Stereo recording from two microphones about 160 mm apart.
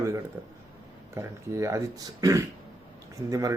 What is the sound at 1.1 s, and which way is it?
Speech, 20° right (ahead or behind).